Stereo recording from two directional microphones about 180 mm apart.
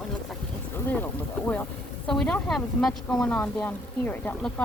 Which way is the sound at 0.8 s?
10° left (ahead or behind).